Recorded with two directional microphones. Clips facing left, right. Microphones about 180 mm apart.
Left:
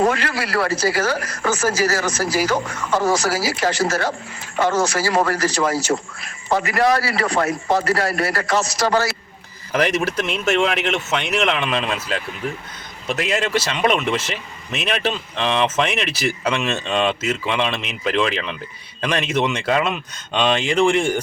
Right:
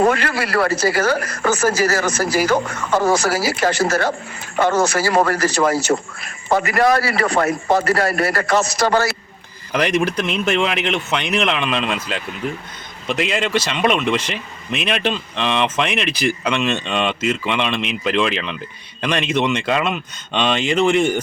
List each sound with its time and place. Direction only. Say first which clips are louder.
0.0 s a man's voice: right 2 dB; 55° right (ahead or behind)
10.2 s speech: even; 5° left (ahead or behind)
13.5 s speech: right 1 dB; 10° left (ahead or behind)